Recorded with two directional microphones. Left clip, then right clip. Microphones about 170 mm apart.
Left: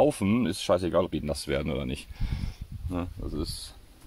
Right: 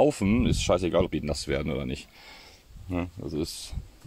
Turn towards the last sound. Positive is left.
turn(degrees=-15)  # may be behind; listen again after turning